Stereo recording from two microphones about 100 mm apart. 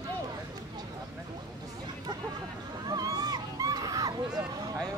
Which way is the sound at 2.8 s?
40° right (ahead or behind).